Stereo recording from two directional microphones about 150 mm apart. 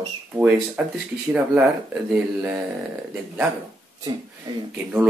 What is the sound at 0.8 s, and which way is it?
Speech, 5° right (ahead or behind).